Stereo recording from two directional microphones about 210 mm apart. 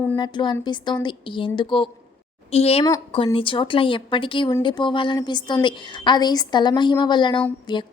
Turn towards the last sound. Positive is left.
turn(degrees=20)  # may be behind; listen again after turning